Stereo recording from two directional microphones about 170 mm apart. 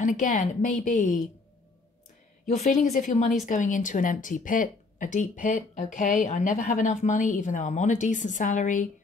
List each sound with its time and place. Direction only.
0.0 s speech: 50° left (ahead or behind)
2.4 s speech: 40° left (ahead or behind)